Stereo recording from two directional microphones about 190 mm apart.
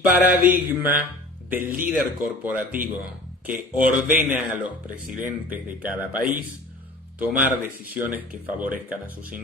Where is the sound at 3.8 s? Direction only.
10° right (ahead or behind).